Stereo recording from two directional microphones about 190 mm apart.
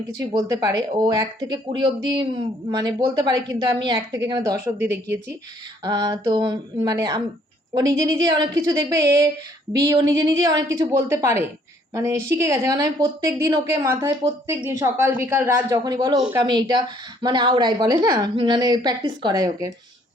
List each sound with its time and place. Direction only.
0.1 s a woman's voice: 20° right (ahead or behind)
5.8 s a woman's voice: 20° right (ahead or behind)
9.0 s a woman's voice: 15° right (ahead or behind)